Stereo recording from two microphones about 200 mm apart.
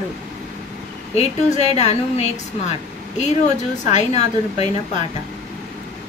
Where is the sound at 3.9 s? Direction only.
35° left (ahead or behind).